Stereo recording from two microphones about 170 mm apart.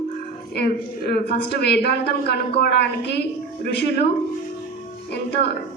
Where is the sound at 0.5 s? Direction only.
70° left (ahead or behind).